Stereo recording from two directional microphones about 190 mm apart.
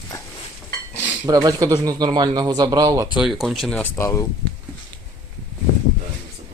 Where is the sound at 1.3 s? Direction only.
20° right (ahead or behind).